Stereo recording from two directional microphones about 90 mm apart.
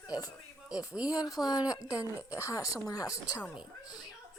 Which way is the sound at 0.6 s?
10° right (ahead or behind).